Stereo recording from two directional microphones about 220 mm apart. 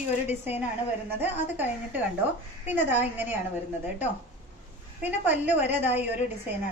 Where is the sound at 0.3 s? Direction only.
10° right (ahead or behind).